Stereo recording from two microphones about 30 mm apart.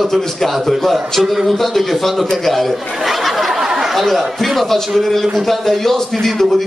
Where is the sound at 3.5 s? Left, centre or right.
Centre.